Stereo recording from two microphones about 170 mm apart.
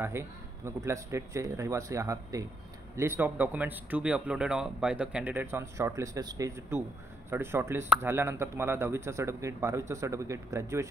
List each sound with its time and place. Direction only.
0.0 s speech: 15° right (ahead or behind)